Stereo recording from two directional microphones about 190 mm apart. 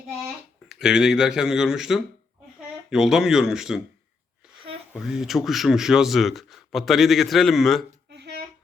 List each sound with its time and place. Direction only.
0.7 s a man's voice: 5° right (ahead or behind)
4.9 s a man's voice: centre (ahead or behind)
8.1 s a sound: 60° right (ahead or behind)